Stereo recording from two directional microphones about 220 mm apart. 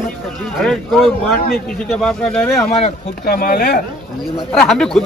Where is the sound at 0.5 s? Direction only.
Centre (ahead or behind).